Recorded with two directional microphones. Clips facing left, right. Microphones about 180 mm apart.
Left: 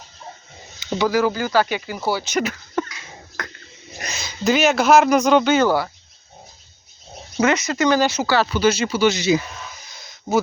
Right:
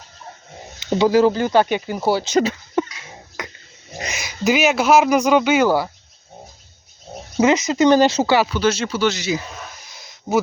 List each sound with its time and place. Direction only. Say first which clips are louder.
0.9 s speech: right 4 dB; 25° right (ahead or behind)
4.0 s speech: right 1 dB; 15° right (ahead or behind)
7.7 s speech: right 4 dB; 15° right (ahead or behind)
8.4 s speech: left 1 dB; centre (ahead or behind)
9.1 s speech: left 5 dB; 20° left (ahead or behind)
9.8 s a sound: right 1 dB; 5° right (ahead or behind)